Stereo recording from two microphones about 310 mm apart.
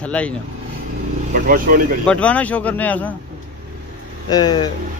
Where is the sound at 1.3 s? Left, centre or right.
Right.